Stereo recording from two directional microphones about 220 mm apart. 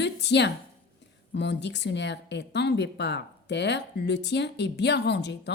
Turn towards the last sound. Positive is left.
turn(degrees=50)  # may be behind; listen again after turning